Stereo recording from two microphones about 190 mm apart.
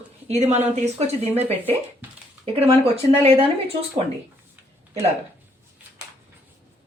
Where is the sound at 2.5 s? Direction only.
30° right (ahead or behind).